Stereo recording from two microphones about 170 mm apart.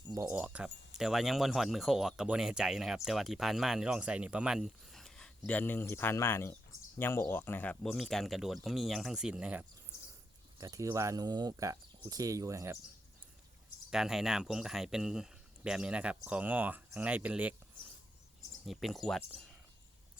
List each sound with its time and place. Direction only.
0.3 s speech: 10° right (ahead or behind)
10.6 s speech: 20° right (ahead or behind)
13.9 s speech: 5° right (ahead or behind)
18.6 s speech: centre (ahead or behind)